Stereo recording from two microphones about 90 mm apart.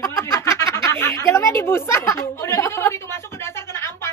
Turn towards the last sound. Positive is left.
turn(degrees=30)  # may be behind; listen again after turning